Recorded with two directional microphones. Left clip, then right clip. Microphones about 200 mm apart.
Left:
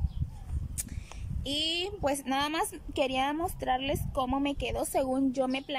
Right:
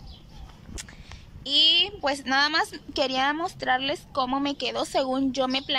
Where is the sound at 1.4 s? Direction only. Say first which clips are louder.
Right 11 dB; 15° left (ahead or behind).